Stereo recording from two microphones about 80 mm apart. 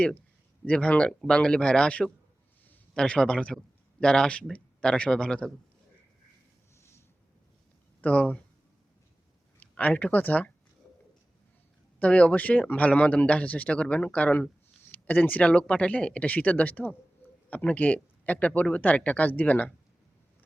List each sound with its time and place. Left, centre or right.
0.6 s speech: centre
8.0 s speech: centre
9.6 s speech: centre
11.9 s speech: centre